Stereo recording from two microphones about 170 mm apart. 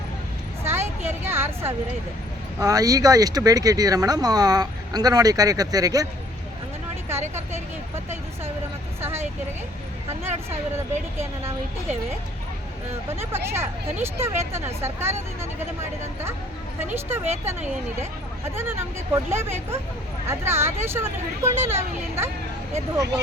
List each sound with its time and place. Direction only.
0.6 s a sound: 15° right (ahead or behind)
2.6 s speech: 20° right (ahead or behind)
7.1 s speech: 15° right (ahead or behind)
9.0 s speech: 15° right (ahead or behind)
11.2 s speech: 15° right (ahead or behind)
13.1 s speech: 15° right (ahead or behind)